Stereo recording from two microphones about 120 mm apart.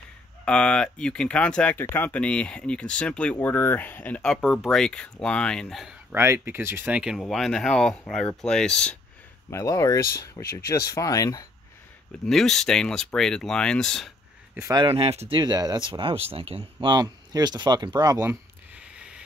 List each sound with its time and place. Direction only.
0.5 s speech: 10° left (ahead or behind)
6.1 s speech: 20° right (ahead or behind)
7.0 s speech: centre (ahead or behind)
9.5 s speech: 25° left (ahead or behind)
12.3 s speech: 5° left (ahead or behind)
14.7 s speech: 45° right (ahead or behind)
16.9 s speech: 35° right (ahead or behind)
18.3 s a sound: 10° right (ahead or behind)